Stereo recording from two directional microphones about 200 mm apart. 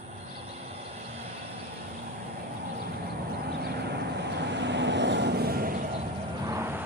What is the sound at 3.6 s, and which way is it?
Vehicle, 55° right (ahead or behind).